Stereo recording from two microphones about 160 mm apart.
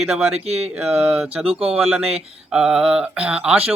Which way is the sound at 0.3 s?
40° right (ahead or behind).